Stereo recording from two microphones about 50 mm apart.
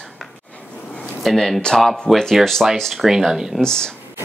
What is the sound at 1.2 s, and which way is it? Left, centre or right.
Speech, centre.